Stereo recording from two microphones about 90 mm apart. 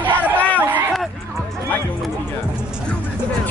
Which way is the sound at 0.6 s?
20° right (ahead or behind).